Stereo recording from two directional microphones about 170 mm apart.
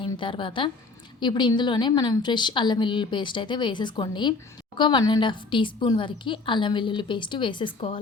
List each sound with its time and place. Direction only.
0.0 s a woman's voice: 30° left (ahead or behind)